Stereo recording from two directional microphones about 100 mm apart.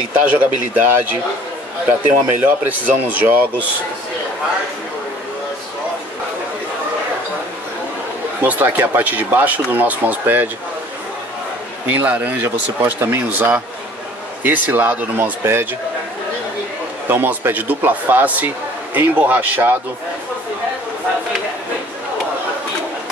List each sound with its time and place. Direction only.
0.1 s speech: 20° right (ahead or behind)
2.2 s speech: 20° right (ahead or behind)
8.4 s speech: 20° right (ahead or behind)
11.9 s speech: 20° right (ahead or behind)
17.1 s speech: 20° right (ahead or behind)